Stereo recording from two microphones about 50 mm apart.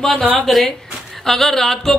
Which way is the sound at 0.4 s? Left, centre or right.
Centre.